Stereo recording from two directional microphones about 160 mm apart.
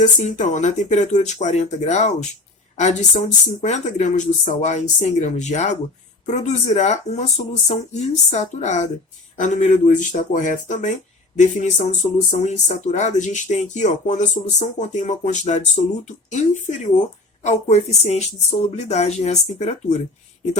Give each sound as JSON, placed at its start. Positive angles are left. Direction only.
{"t": 0.0, "sound": "speech", "side_deg": 50}